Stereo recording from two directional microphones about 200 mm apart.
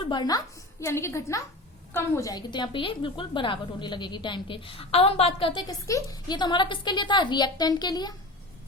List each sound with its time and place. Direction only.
0.0 s a woman's voice: 20° left (ahead or behind)